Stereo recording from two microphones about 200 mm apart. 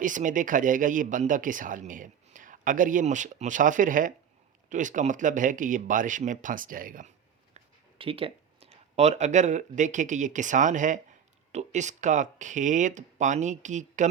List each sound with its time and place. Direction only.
0.0 s speech: 40° right (ahead or behind)
7.5 s speech: 25° right (ahead or behind)